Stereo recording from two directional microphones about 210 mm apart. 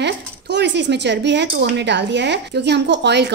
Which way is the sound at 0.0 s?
55° right (ahead or behind).